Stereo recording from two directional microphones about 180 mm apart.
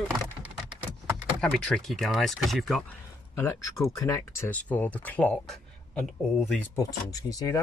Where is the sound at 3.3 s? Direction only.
10° left (ahead or behind).